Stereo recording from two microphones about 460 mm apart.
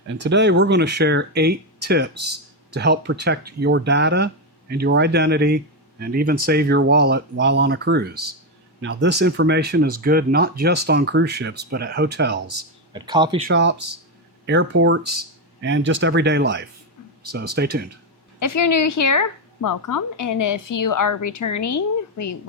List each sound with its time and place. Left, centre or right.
0.1 s speech: right
12.9 s speech: centre
13.5 s speech: right
18.3 s a woman's voice: left